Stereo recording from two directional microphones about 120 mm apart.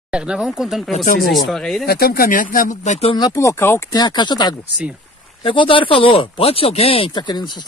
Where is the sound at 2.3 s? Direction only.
85° left.